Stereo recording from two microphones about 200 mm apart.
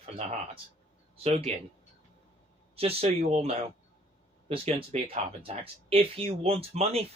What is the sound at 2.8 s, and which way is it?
Speech, 30° right (ahead or behind).